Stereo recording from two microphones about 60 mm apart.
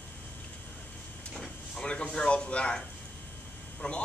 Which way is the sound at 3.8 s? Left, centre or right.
Centre.